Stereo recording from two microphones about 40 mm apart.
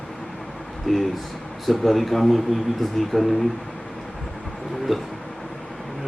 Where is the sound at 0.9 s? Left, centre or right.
Centre.